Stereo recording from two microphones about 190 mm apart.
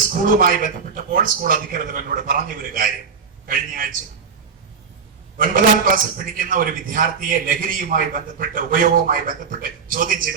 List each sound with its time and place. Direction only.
0.3 s a man's voice: 45° right (ahead or behind)
5.4 s a man's voice: 45° right (ahead or behind)